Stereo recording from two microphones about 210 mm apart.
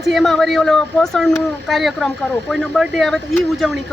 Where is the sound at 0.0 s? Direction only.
Centre (ahead or behind).